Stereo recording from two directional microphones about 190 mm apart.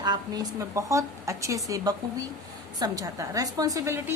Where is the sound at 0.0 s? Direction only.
20° right (ahead or behind).